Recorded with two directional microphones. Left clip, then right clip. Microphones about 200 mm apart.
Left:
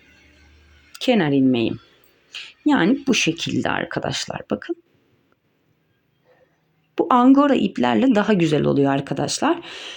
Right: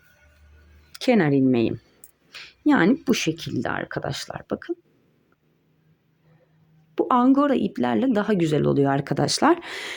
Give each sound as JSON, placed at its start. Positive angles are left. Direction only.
{"t": 0.9, "sound": "speech", "side_deg": -10}
{"t": 6.9, "sound": "speech", "side_deg": -5}